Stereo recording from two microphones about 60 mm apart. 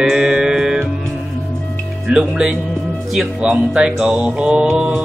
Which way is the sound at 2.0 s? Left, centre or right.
Centre.